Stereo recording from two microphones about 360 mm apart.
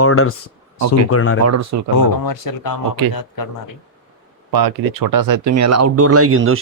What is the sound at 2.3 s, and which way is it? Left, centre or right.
Speech, left.